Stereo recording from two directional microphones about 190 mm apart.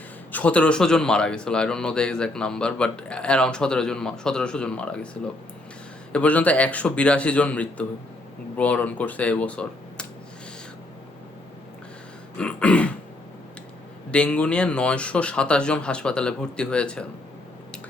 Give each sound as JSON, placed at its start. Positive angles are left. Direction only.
{"t": 0.3, "sound": "a man's voice", "side_deg": 5}
{"t": 12.4, "sound": "speech", "side_deg": 5}
{"t": 14.1, "sound": "a man's voice", "side_deg": 5}